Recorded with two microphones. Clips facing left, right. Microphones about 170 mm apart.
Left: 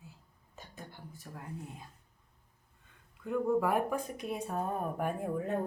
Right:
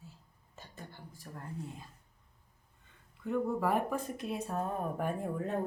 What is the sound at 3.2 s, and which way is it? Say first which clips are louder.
Speech: left 2 dB; centre (ahead or behind).